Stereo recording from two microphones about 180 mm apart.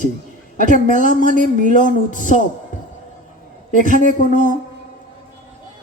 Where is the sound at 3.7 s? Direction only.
45° left (ahead or behind).